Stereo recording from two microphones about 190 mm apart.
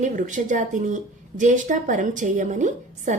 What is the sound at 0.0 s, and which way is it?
A woman's voice, 40° right (ahead or behind).